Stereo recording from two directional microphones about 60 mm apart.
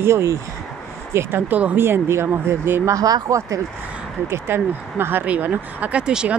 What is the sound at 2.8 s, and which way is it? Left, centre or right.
Speech, right.